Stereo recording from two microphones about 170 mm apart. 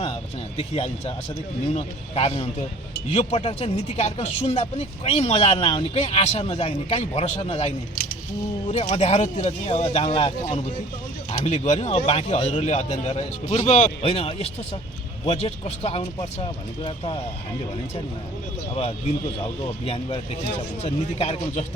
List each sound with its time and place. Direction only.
0.0 s speech: 35° left (ahead or behind)
18.7 s speech: 35° left (ahead or behind)